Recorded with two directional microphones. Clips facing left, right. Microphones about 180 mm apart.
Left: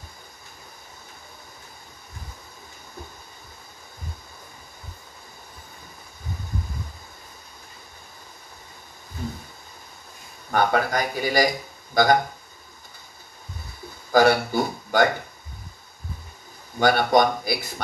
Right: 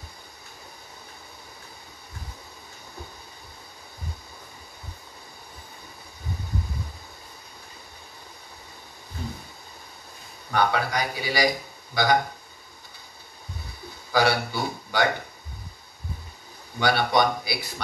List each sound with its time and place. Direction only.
10.5 s speech: 50° left (ahead or behind)
14.1 s speech: 50° left (ahead or behind)
16.8 s speech: 50° left (ahead or behind)